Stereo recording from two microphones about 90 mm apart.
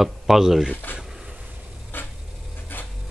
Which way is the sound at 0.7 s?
20° left (ahead or behind).